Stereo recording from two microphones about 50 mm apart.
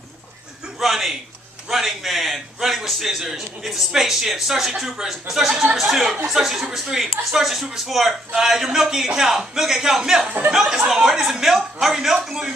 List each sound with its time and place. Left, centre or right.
0.7 s a man's voice: centre